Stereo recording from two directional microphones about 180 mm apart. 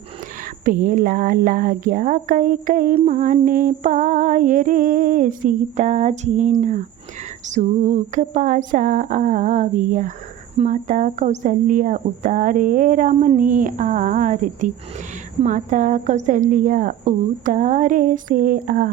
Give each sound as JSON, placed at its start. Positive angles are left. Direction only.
{"t": 0.6, "sound": "a woman's voice", "side_deg": -50}